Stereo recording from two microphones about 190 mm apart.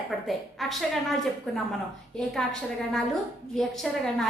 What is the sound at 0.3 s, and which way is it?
A woman's voice, centre (ahead or behind).